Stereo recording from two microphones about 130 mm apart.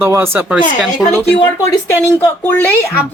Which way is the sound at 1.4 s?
25° left (ahead or behind).